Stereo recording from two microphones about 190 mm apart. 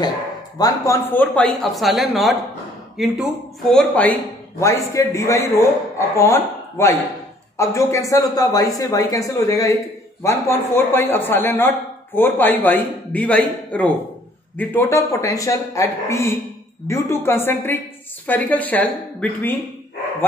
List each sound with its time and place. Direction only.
0.6 s speech: 15° left (ahead or behind)
4.6 s a man's voice: 15° left (ahead or behind)